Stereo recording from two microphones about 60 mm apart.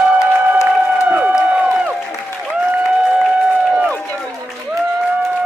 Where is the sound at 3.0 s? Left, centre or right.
Centre.